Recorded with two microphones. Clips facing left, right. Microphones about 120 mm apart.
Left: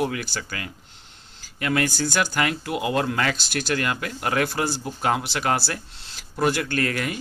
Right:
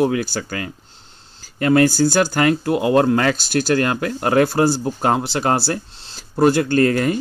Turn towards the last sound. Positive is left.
turn(degrees=-35)  # may be behind; listen again after turning